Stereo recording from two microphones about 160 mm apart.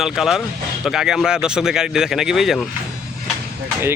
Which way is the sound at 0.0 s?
Centre (ahead or behind).